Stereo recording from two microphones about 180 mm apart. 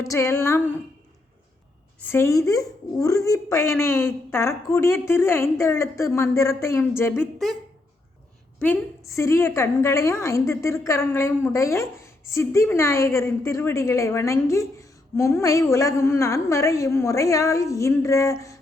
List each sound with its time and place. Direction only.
0.0 s a woman's voice: 15° left (ahead or behind)
2.0 s a woman's voice: 15° left (ahead or behind)
8.6 s a woman's voice: 15° left (ahead or behind)